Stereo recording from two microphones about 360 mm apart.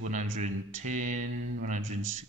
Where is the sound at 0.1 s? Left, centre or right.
Centre.